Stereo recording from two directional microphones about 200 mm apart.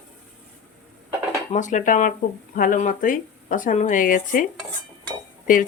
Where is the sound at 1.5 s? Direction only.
40° left (ahead or behind).